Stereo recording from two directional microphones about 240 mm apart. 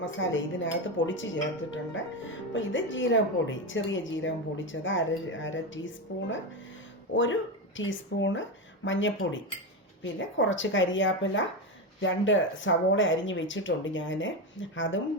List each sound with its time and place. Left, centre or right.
0.0 s speech: left
7.1 s speech: left